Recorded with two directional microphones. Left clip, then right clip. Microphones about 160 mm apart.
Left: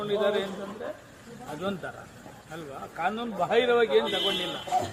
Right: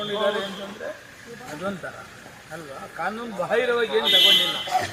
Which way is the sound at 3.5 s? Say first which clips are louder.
Right 1 dB; 30° left (ahead or behind).